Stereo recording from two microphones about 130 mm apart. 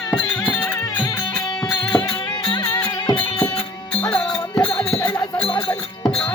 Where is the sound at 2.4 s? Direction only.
20° left (ahead or behind).